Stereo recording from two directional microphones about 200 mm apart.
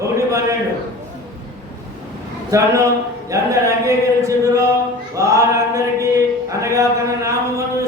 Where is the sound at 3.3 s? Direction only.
15° right (ahead or behind).